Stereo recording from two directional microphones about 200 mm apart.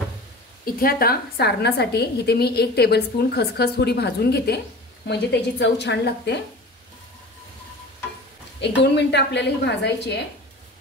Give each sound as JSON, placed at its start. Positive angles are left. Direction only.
{"t": 0.7, "sound": "a woman's voice", "side_deg": 45}
{"t": 8.5, "sound": "a woman's voice", "side_deg": 60}